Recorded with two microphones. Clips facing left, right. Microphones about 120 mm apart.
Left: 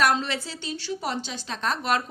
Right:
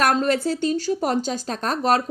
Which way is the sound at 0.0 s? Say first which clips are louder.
Right 5 dB; 50° right (ahead or behind).